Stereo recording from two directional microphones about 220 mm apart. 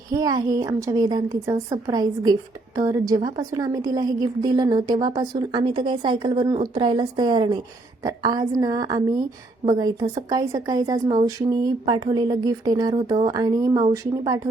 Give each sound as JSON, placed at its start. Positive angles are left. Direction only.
{"t": 0.1, "sound": "a woman's voice", "side_deg": -15}